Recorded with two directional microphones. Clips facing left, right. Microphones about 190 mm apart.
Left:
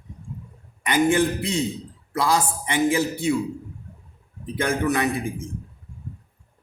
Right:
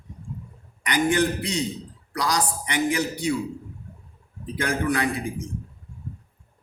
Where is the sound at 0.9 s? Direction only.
25° left (ahead or behind).